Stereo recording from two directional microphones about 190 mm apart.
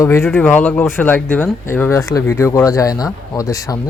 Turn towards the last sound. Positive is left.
turn(degrees=15)  # may be behind; listen again after turning